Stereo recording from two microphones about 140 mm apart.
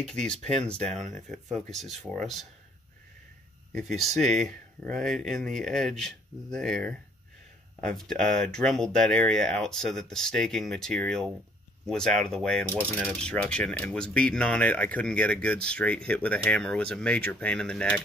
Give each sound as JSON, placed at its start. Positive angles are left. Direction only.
{"t": 0.0, "sound": "speech", "side_deg": 5}
{"t": 0.4, "sound": "speech", "side_deg": -55}
{"t": 2.1, "sound": "speech", "side_deg": 0}
{"t": 3.7, "sound": "speech", "side_deg": 0}